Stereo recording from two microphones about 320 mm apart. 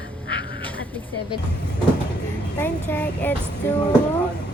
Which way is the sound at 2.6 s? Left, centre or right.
Centre.